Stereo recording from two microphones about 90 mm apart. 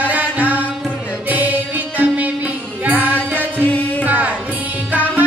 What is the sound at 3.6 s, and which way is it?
Music, 20° left (ahead or behind).